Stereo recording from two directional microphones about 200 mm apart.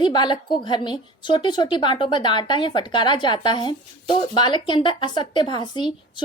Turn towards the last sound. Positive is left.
turn(degrees=25)  # may be behind; listen again after turning